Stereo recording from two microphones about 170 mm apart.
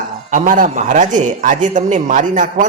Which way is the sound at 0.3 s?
50° right (ahead or behind).